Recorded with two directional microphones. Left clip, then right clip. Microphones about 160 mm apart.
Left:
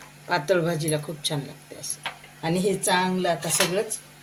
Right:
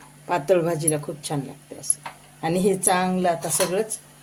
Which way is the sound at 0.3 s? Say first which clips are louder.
Right 2 dB; 55° right (ahead or behind).